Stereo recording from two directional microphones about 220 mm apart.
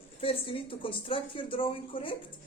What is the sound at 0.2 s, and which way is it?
A woman's voice, 25° left (ahead or behind).